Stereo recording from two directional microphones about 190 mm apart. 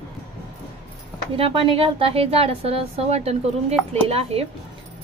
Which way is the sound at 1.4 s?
30° right (ahead or behind).